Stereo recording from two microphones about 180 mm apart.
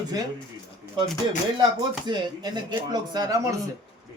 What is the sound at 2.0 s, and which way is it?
Speech, 25° right (ahead or behind).